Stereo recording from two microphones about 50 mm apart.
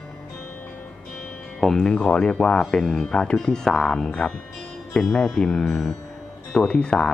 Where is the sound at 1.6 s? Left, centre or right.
Centre.